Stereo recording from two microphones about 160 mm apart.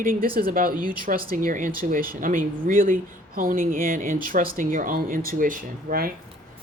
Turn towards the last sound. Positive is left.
turn(degrees=-60)  # may be behind; listen again after turning